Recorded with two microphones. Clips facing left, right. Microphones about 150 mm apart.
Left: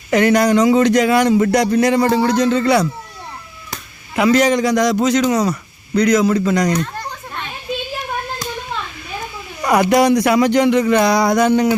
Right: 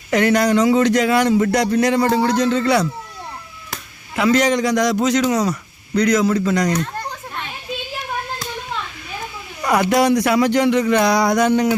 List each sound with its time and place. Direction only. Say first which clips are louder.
0.1 s speech: left 2 dB; 10° left (ahead or behind)
4.1 s a man's voice: left 2 dB; 15° left (ahead or behind)
9.7 s speech: left 3 dB; 15° left (ahead or behind)
10.9 s a man's voice: left 2 dB; centre (ahead or behind)